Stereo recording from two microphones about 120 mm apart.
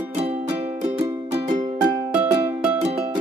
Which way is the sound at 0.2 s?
60° right (ahead or behind).